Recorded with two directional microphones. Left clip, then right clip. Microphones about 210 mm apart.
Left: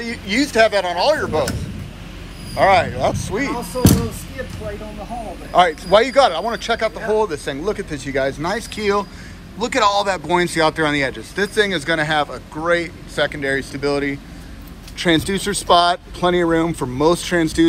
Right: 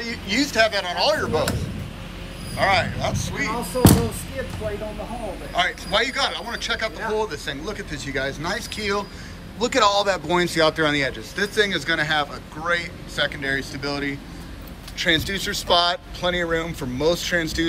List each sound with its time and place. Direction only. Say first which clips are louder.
0.0 s speech: left 3 dB; 10° right (ahead or behind)
5.5 s speech: left 9 dB; centre (ahead or behind)